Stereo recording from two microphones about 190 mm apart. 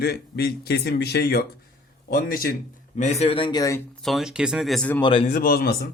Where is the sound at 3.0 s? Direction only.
35° left (ahead or behind); by 3.8 s 15° left (ahead or behind).